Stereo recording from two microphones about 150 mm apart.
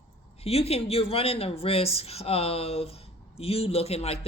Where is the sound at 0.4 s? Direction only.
40° left (ahead or behind).